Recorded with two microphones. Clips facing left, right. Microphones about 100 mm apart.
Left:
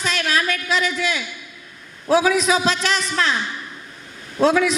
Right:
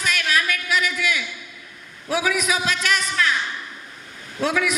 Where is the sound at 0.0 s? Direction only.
30° left (ahead or behind).